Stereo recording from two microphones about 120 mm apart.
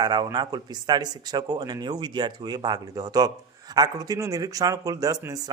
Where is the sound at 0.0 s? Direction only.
35° right (ahead or behind).